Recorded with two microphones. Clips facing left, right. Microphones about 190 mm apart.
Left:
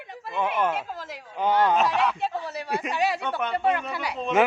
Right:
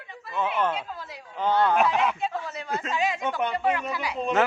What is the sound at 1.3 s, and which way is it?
Speech, 15° left (ahead or behind).